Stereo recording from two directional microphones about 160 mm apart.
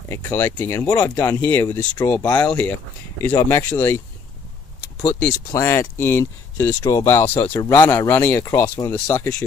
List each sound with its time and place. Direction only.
0.1 s speech: 15° left (ahead or behind)
5.5 s speech: 15° left (ahead or behind)